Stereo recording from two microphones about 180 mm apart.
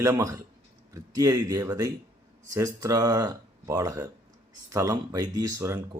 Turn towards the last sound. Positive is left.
turn(degrees=-20)  # may be behind; listen again after turning